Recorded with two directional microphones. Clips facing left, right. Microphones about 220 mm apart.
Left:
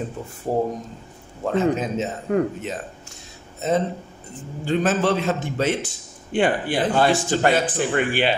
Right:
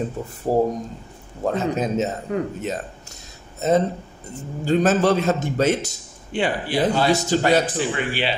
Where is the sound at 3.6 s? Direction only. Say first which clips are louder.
Right 3 dB; 40° right (ahead or behind).